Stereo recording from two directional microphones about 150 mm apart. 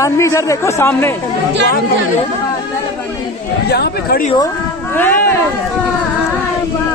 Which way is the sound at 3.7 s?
90° left.